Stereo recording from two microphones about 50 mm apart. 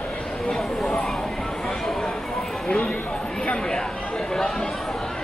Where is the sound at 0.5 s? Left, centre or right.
Centre.